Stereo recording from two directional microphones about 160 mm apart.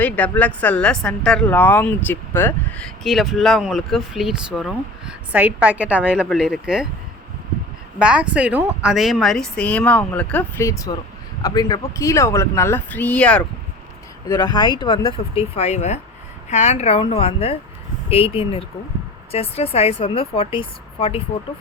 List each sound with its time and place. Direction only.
0.0 s a woman's voice: 10° left (ahead or behind)
7.9 s a woman's voice: 5° right (ahead or behind)
10.6 s speech: 20° left (ahead or behind)
14.3 s speech: 25° left (ahead or behind); by 20.6 s 40° left (ahead or behind)